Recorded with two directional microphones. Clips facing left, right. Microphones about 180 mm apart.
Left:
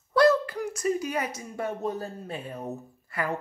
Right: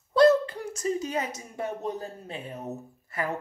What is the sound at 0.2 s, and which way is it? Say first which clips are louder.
Speech: right 2 dB; 25° right (ahead or behind).